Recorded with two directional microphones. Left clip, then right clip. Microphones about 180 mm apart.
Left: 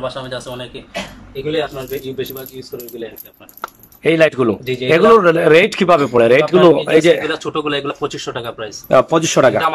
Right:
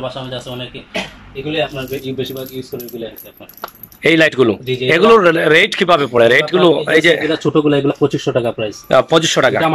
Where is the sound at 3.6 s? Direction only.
Centre (ahead or behind).